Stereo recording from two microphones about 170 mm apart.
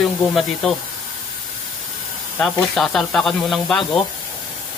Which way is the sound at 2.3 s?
5° left (ahead or behind).